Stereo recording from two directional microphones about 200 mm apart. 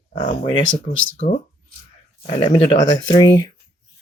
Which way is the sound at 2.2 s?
25° left (ahead or behind).